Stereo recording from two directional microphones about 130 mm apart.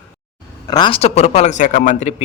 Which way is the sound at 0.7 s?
35° left (ahead or behind).